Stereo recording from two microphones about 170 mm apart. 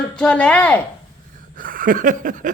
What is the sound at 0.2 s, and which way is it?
Speech, 5° left (ahead or behind).